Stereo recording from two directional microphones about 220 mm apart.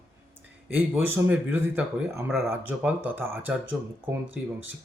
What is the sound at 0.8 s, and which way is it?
Speech, 10° right (ahead or behind).